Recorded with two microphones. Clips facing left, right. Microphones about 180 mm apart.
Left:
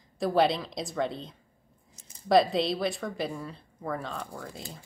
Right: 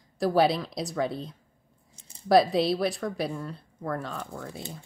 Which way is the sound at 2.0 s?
30° right (ahead or behind).